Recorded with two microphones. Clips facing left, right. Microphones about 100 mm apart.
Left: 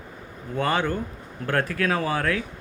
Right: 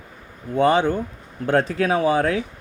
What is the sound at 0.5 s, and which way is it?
Speech, 20° right (ahead or behind).